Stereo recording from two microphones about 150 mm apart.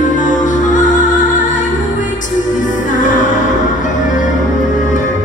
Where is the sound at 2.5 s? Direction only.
60° left (ahead or behind).